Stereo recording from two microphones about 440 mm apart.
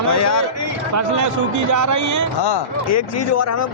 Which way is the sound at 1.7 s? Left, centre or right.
Right.